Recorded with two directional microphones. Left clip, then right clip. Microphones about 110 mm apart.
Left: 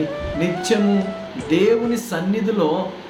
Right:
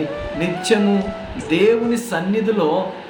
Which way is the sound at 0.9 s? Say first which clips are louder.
Right 1 dB; centre (ahead or behind).